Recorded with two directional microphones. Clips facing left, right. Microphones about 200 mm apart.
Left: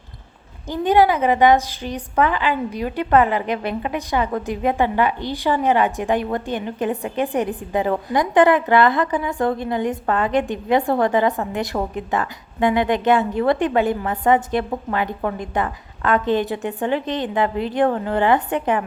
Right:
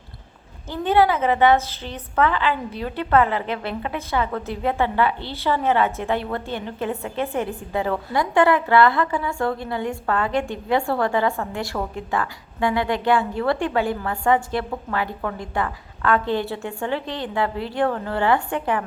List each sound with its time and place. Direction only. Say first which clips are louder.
0.7 s a woman's voice: left 2 dB; 15° left (ahead or behind)